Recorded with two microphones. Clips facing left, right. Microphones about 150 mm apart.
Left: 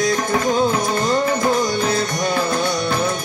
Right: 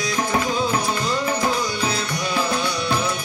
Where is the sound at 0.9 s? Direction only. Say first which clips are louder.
Left 5 dB; 50° left (ahead or behind).